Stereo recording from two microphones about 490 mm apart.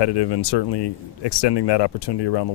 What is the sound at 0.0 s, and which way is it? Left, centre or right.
Speech, left.